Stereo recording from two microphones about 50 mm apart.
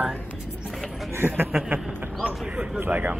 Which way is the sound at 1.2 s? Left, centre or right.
Right.